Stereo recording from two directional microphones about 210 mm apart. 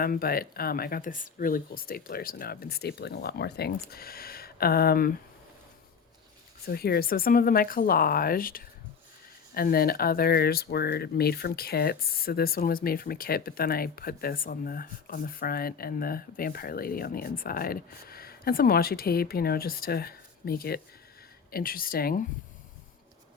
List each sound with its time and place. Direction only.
0.0 s speech: 45° left (ahead or behind)
6.7 s speech: 50° left (ahead or behind)